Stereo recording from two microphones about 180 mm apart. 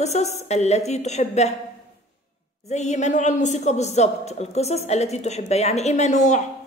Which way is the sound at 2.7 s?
40° left (ahead or behind).